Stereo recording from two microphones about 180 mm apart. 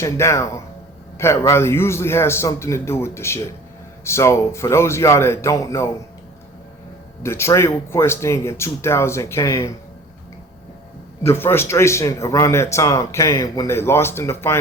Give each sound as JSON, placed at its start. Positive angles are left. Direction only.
{"t": 0.0, "sound": "a man's voice", "side_deg": 15}
{"t": 7.2, "sound": "a man's voice", "side_deg": 15}
{"t": 11.3, "sound": "a man's voice", "side_deg": 15}